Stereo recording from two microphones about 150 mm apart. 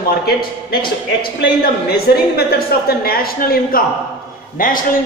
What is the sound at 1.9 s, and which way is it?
A woman's voice, 90° left.